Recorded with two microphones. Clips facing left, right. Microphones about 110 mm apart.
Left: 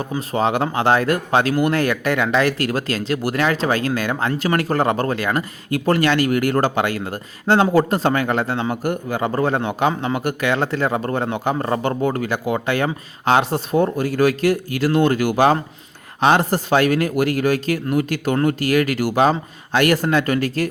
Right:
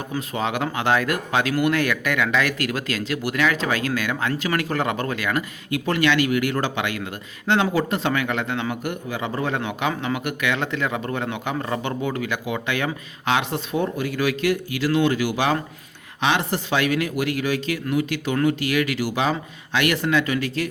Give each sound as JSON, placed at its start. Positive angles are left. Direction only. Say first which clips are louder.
{"t": 0.2, "sound": "speech", "louder": "left 6 dB", "side_deg": 35}